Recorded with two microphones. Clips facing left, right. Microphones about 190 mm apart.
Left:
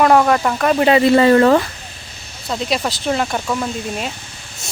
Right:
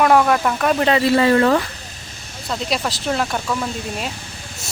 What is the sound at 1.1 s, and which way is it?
Speech, 35° left (ahead or behind).